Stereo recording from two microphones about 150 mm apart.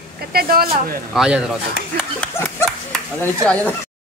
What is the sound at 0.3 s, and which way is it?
Speech, 85° right.